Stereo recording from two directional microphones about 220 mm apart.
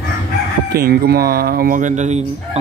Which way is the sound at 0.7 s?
45° right (ahead or behind).